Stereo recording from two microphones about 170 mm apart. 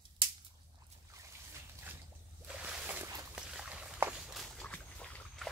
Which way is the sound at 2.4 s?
5° right (ahead or behind).